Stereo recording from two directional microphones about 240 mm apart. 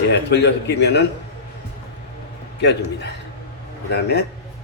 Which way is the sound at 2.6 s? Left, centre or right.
Left.